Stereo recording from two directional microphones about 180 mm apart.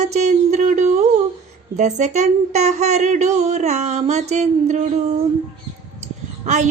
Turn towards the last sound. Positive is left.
turn(degrees=-40)  # may be behind; listen again after turning